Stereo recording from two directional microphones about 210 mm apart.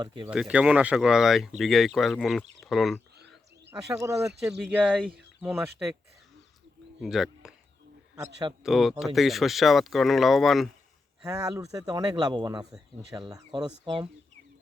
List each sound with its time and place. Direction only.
0.0 s speech: 20° right (ahead or behind)
0.3 s speech: 5° right (ahead or behind)
3.7 s speech: 15° right (ahead or behind)
7.0 s speech: centre (ahead or behind)
8.6 s speech: centre (ahead or behind)
11.2 s speech: 15° right (ahead or behind)